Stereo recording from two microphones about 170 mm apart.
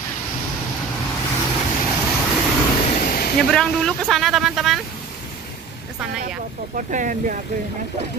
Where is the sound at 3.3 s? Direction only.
5° left (ahead or behind).